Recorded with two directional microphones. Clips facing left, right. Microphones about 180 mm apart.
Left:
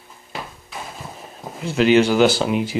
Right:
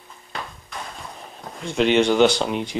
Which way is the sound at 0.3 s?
5° left (ahead or behind).